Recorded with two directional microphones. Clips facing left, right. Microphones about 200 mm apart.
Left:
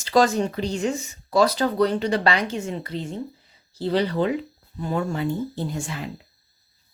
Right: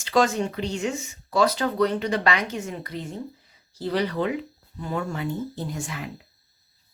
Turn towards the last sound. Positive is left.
turn(degrees=30)  # may be behind; listen again after turning